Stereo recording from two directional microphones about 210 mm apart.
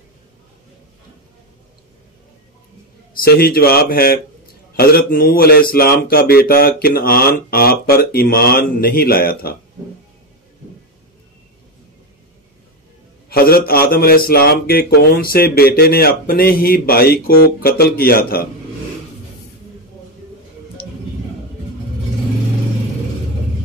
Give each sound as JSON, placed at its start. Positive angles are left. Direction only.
{"t": 3.2, "sound": "mantra", "side_deg": 45}
{"t": 13.3, "sound": "mantra", "side_deg": 45}